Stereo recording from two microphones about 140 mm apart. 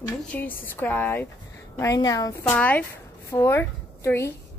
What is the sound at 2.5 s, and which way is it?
Speech, 10° left (ahead or behind).